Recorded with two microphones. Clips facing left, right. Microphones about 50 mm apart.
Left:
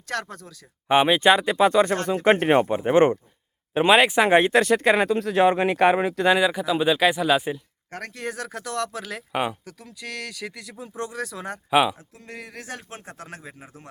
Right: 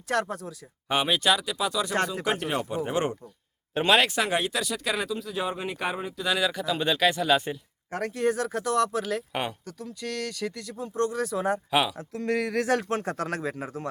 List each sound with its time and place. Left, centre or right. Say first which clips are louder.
0.1 s speech: right 3 dB; centre
0.9 s speech: left 7 dB; left
3.8 s speech: left 5 dB; centre
4.3 s speech: left 10 dB; left
6.4 s speech: left 5 dB; centre
7.9 s speech: right 6 dB; centre
11.7 s speech: left 8 dB; centre
11.9 s speech: right 12 dB; right